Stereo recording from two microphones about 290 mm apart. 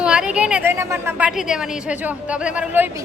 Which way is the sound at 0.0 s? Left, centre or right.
Centre.